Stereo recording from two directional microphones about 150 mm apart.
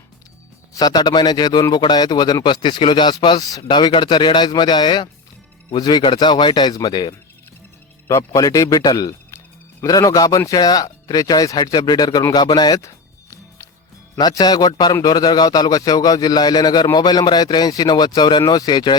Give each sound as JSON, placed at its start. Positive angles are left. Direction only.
{"t": 0.7, "sound": "a man's voice", "side_deg": 25}
{"t": 14.2, "sound": "a man's voice", "side_deg": 25}